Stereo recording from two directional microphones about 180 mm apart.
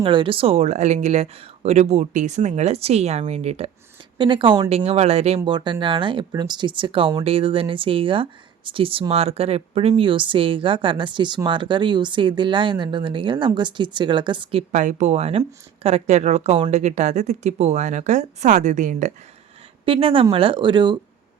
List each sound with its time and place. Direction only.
0.0 s speech: 30° right (ahead or behind)
4.7 s speech: 35° right (ahead or behind)
5.4 s speech: 25° right (ahead or behind)
14.7 s speech: 45° right (ahead or behind)
19.8 s speech: 30° right (ahead or behind)